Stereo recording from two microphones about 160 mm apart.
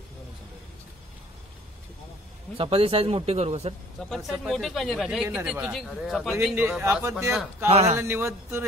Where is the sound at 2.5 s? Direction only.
35° right (ahead or behind).